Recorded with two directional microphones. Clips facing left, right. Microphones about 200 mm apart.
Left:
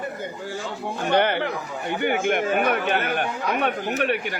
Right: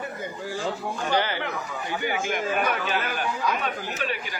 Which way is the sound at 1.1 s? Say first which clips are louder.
Left 6 dB; 60° left (ahead or behind).